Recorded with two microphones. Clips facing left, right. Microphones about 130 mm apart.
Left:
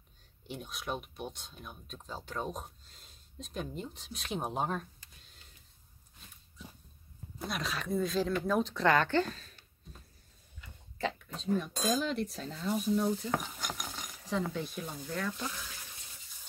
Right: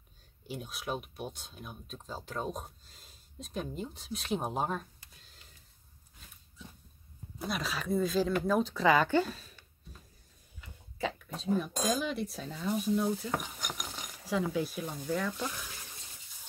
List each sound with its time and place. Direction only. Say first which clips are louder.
0.5 s speech: right 1 dB; 5° right (ahead or behind)
7.3 s speech: right 1 dB; centre (ahead or behind)
11.0 s speech: even; 5° right (ahead or behind)
13.6 s stir: left 1 dB; 15° right (ahead or behind)